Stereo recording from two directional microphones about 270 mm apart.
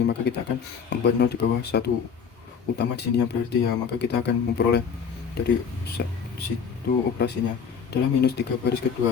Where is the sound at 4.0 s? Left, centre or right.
Left.